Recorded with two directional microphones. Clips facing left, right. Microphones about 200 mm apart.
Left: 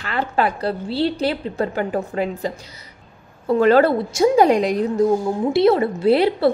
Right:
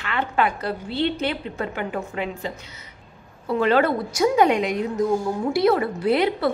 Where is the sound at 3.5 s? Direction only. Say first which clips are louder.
Left 5 dB; 40° left (ahead or behind).